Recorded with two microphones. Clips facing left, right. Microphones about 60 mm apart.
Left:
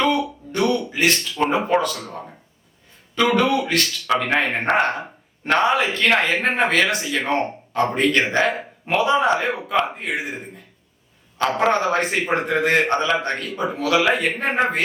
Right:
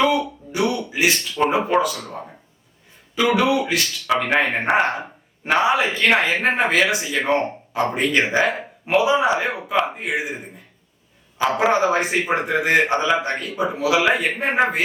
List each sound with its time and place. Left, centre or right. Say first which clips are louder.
0.0 s speech: right 1 dB; centre
3.2 s a man's voice: even; centre